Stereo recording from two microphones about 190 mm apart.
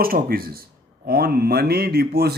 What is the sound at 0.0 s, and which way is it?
Speech, 50° right (ahead or behind).